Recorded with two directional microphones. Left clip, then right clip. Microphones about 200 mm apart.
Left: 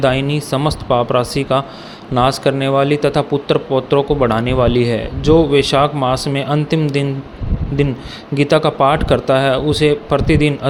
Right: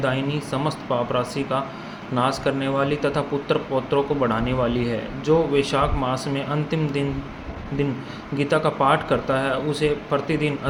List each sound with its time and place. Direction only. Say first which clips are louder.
0.0 s speech: left 8 dB; 45° left (ahead or behind)